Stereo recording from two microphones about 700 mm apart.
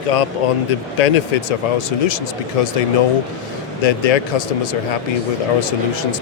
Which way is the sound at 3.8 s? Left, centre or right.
Left.